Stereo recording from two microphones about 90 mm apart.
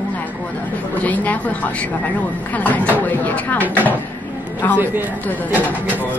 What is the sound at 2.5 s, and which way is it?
Speech, 15° left (ahead or behind).